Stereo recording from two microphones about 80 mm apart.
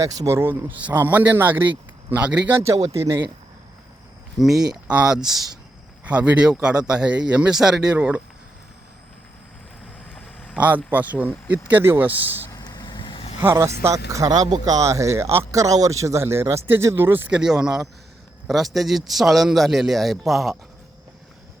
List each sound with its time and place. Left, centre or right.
0.3 s speech: right
0.8 s speech: right
2.6 s speech: right
4.4 s a man's voice: centre
6.1 s a man's voice: centre
10.8 s speech: centre
12.5 s vehicle: left
13.4 s speech: right
15.6 s speech: right
17.3 s a man's voice: centre